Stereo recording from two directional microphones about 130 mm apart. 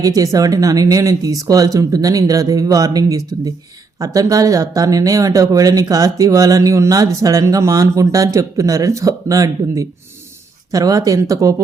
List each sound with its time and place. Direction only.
0.0 s speech: 25° right (ahead or behind)